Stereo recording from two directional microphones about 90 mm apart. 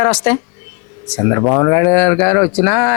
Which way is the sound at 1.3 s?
25° left (ahead or behind).